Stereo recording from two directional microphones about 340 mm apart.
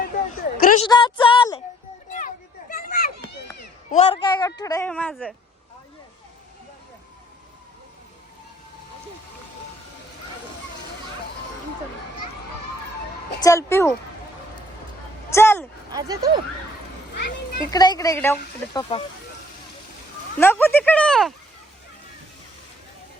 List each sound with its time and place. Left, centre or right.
0.0 s a sound: left
0.9 s a woman's voice: centre
2.0 s a sound: left
3.9 s a woman's voice: centre
13.4 s a woman's voice: centre
15.3 s speech: centre
15.9 s speech: centre
17.7 s a woman's voice: centre
20.4 s speech: centre